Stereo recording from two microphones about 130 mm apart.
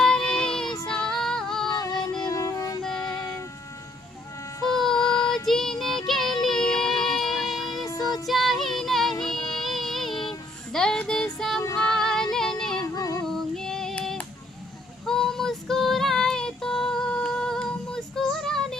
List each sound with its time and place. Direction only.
0.0 s child singing: 5° left (ahead or behind)
0.9 s female singing: 5° left (ahead or behind)
1.7 s music: 30° left (ahead or behind)
4.6 s music: centre (ahead or behind)
5.3 s child singing: centre (ahead or behind)
7.9 s music: 30° left (ahead or behind)
8.1 s music: centre (ahead or behind)
10.7 s child singing: 5° left (ahead or behind)
11.8 s music: 5° left (ahead or behind)
13.0 s female singing: 30° left (ahead or behind)
13.2 s child singing: 5° left (ahead or behind)
15.0 s female singing: 5° left (ahead or behind)